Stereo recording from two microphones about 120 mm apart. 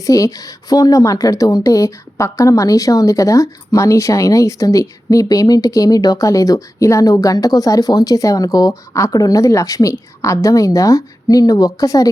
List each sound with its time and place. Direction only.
0.0 s speech: 30° left (ahead or behind)